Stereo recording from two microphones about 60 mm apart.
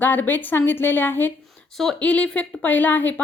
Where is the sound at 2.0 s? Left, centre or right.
Left.